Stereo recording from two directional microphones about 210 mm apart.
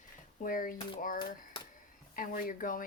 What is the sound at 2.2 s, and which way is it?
Speech, 40° left (ahead or behind).